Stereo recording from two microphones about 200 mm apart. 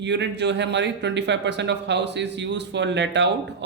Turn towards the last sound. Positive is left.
turn(degrees=-60)  # may be behind; listen again after turning